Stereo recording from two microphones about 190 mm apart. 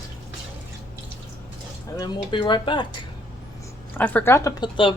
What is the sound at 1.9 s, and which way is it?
Speech, 25° left (ahead or behind).